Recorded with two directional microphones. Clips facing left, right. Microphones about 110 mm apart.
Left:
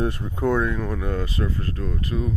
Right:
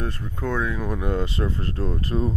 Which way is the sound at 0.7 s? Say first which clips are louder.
Right 1 dB; 15° right (ahead or behind).